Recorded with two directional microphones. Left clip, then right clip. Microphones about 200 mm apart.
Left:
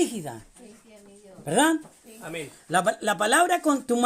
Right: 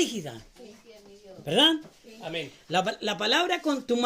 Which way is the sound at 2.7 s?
30° left (ahead or behind).